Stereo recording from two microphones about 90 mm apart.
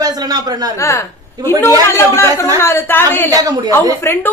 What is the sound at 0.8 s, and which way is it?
A woman's voice, 30° left (ahead or behind).